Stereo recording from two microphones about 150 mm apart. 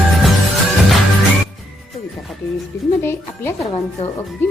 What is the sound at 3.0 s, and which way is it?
Music, 15° left (ahead or behind).